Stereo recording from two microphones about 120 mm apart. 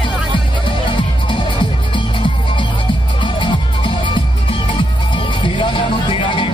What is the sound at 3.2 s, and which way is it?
Music, 45° left (ahead or behind).